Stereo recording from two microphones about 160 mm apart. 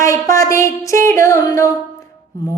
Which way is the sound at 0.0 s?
20° left (ahead or behind).